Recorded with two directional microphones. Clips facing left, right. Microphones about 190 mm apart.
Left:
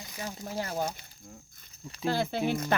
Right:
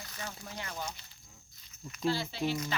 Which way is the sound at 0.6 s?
35° left (ahead or behind).